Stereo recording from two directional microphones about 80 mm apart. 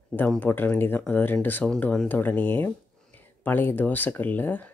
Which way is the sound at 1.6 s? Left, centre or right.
Centre.